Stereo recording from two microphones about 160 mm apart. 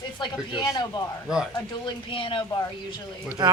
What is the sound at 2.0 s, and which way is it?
Speech, 35° left (ahead or behind).